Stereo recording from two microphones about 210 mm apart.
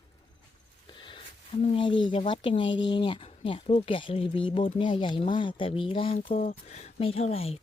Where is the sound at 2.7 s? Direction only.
60° left (ahead or behind).